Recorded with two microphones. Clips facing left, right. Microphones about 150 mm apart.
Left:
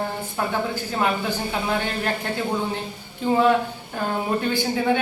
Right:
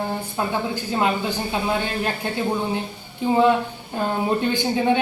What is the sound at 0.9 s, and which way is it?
Speech, 20° right (ahead or behind).